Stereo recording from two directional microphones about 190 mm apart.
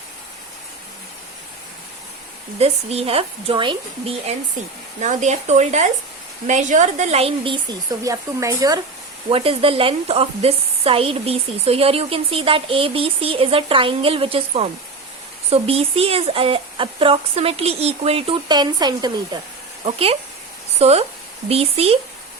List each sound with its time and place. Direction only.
2.6 s speech: 35° right (ahead or behind); by 8.8 s 20° right (ahead or behind)
9.3 s speech: 30° right (ahead or behind)